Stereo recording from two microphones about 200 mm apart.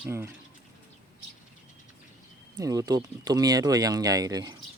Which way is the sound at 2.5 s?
20° right (ahead or behind).